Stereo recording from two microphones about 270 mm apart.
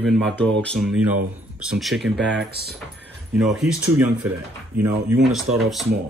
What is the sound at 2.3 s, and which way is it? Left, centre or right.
Speech, right.